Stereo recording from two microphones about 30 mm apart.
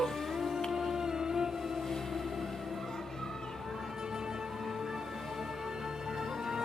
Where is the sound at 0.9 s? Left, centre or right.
Right.